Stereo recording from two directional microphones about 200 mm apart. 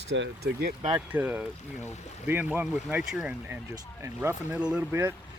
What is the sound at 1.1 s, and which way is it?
Speech, 10° right (ahead or behind).